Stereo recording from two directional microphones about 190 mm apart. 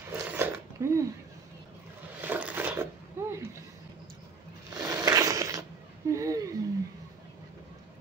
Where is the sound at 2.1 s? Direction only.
10° right (ahead or behind).